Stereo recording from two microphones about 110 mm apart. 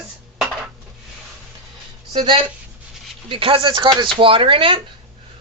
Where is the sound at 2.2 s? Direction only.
50° right (ahead or behind).